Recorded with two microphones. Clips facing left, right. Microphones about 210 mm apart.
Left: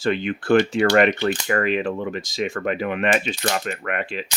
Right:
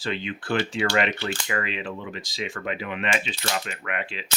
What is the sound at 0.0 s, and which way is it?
Speech, 50° left (ahead or behind).